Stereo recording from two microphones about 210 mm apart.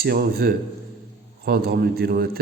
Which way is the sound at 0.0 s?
50° right (ahead or behind).